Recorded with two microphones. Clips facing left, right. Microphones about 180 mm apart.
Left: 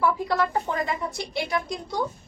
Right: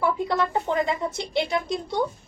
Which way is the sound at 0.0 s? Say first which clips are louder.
Even; 20° right (ahead or behind).